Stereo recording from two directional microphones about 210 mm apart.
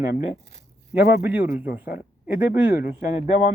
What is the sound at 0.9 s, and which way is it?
A man's voice, 10° right (ahead or behind).